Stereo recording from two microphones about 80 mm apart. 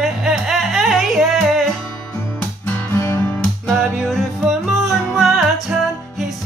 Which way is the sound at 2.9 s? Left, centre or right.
Left.